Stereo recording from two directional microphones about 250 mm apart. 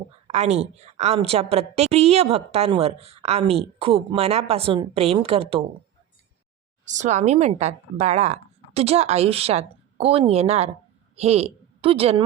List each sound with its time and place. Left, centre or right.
0.3 s a woman's voice: right
6.8 s a woman's voice: right